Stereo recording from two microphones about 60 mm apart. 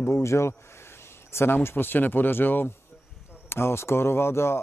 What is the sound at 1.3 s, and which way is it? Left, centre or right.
Speech, left.